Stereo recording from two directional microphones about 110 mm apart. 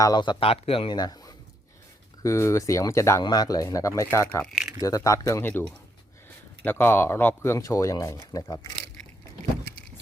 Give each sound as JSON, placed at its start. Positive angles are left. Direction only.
{"t": 0.0, "sound": "speech", "side_deg": 40}
{"t": 0.3, "sound": "speech", "side_deg": 60}
{"t": 0.9, "sound": "speech", "side_deg": 35}
{"t": 2.2, "sound": "speech", "side_deg": 25}
{"t": 4.4, "sound": "speech", "side_deg": -5}
{"t": 4.8, "sound": "speech", "side_deg": 30}
{"t": 6.7, "sound": "speech", "side_deg": 20}